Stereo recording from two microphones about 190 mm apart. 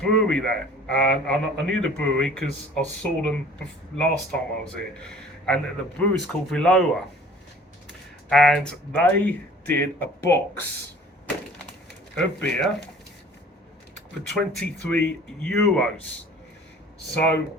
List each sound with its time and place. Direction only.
0.0 s a man's voice: 5° left (ahead or behind)
7.9 s speech: 5° left (ahead or behind)
12.1 s a man's voice: 5° left (ahead or behind)
14.3 s a man's voice: 5° left (ahead or behind)